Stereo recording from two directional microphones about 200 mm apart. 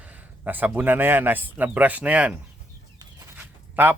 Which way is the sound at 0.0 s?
10° right (ahead or behind).